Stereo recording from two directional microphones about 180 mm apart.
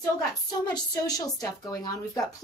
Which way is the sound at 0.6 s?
20° left (ahead or behind).